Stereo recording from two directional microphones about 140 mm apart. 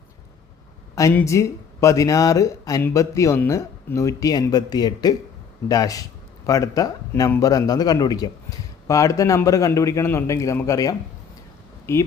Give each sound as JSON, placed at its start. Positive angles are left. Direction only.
{"t": 1.1, "sound": "speech", "side_deg": 20}